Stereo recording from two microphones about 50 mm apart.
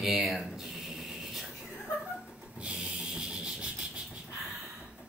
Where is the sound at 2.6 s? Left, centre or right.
Right.